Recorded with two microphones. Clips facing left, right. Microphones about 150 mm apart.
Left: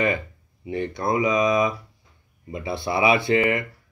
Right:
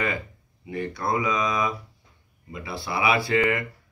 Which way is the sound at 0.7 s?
20° left (ahead or behind).